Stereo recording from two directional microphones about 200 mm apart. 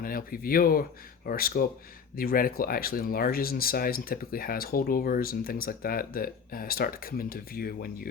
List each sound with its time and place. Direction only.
0.0 s speech: 45° left (ahead or behind)